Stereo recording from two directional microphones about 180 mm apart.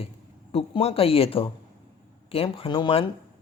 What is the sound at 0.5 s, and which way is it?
Speech, 35° left (ahead or behind).